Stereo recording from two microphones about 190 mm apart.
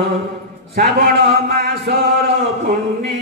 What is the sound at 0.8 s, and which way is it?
Speech, 50° right (ahead or behind).